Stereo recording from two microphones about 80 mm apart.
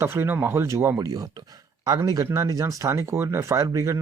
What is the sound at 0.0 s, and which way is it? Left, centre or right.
Speech, right.